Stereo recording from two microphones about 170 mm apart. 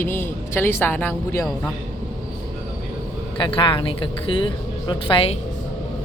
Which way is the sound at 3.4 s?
30° left (ahead or behind).